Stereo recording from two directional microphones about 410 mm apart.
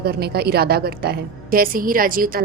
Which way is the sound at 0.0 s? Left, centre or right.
Right.